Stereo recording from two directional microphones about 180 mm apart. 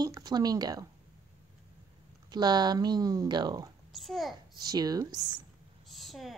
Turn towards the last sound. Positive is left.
turn(degrees=0)  # may be behind; listen again after turning